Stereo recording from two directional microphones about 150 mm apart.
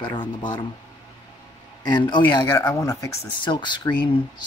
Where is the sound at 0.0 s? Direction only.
30° left (ahead or behind).